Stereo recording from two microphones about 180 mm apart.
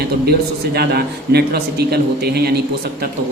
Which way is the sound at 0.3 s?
60° right (ahead or behind).